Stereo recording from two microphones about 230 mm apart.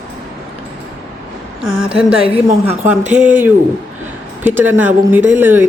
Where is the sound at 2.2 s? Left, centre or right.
Right.